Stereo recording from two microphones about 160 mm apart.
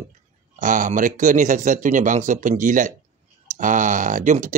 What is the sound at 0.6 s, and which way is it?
Speech, 55° right (ahead or behind).